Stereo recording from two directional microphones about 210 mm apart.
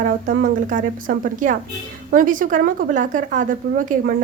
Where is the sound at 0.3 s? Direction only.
40° right (ahead or behind).